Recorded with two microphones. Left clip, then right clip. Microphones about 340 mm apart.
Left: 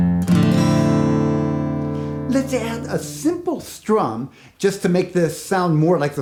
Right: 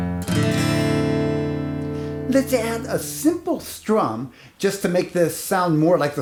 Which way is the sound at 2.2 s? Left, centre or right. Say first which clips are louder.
Right 2 dB; right.